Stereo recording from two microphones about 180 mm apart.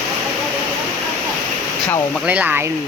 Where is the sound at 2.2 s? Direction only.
10° right (ahead or behind).